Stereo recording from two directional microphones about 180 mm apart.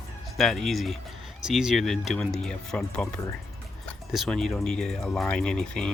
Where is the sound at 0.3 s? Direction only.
Centre (ahead or behind).